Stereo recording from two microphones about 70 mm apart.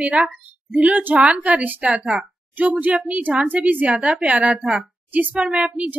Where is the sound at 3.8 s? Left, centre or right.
Centre.